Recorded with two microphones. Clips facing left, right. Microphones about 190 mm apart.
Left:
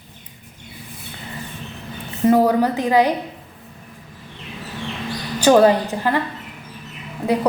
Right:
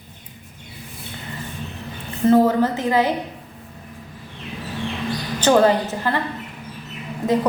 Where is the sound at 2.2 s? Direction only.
10° left (ahead or behind).